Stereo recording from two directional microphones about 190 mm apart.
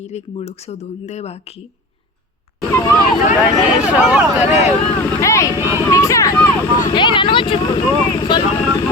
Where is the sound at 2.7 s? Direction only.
15° left (ahead or behind).